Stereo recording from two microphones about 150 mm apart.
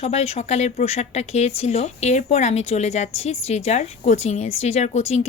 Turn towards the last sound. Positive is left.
turn(degrees=50)  # may be behind; listen again after turning